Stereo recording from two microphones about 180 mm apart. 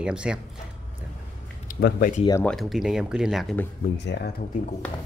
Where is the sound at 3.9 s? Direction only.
70° left (ahead or behind).